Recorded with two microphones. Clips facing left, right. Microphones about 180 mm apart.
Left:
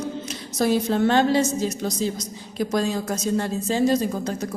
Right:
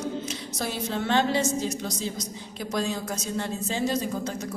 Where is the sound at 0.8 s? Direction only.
45° left (ahead or behind).